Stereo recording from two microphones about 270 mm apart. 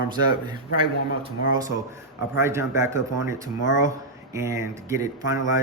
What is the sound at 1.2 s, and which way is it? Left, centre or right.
Speech, centre.